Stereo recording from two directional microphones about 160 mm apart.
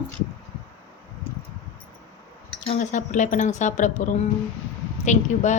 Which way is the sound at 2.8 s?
50° left (ahead or behind).